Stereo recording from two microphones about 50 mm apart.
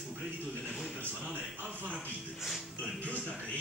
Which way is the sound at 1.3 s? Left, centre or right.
Right.